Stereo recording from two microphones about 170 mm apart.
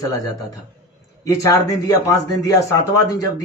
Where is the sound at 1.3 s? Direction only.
20° left (ahead or behind).